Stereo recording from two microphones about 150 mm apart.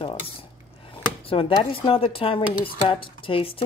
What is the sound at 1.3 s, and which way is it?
Speech, 35° left (ahead or behind).